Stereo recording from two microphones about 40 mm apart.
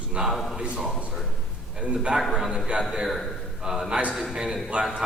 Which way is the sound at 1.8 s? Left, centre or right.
Right.